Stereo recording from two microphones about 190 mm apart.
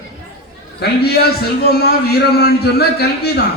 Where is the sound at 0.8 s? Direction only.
60° left (ahead or behind).